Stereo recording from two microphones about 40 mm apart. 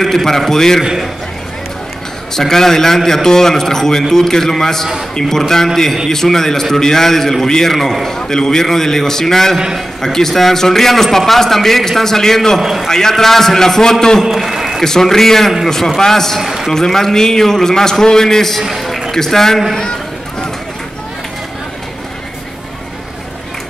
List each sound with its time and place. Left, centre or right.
0.0 s a man's voice: centre
2.3 s a man's voice: centre
6.0 s a man's voice: centre
12.5 s a man's voice: centre
12.8 s a man's voice: centre
14.3 s a sound: centre
14.8 s a man's voice: centre
16.3 s a man's voice: centre
16.7 s a man's voice: centre
18.6 s a man's voice: centre
19.1 s a man's voice: centre
19.8 s run: left